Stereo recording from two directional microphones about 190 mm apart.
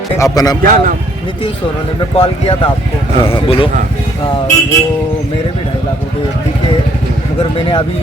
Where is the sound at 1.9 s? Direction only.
30° left (ahead or behind).